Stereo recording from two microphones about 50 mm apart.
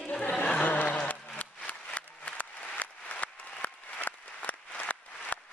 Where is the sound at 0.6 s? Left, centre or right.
Left.